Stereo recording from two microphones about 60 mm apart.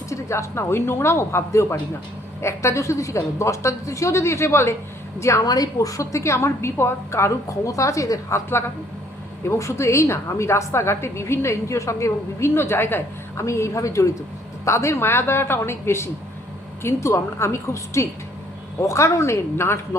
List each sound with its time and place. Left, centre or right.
0.1 s a woman's voice: left
5.2 s a woman's voice: left
9.5 s a woman's voice: left
13.4 s a woman's voice: left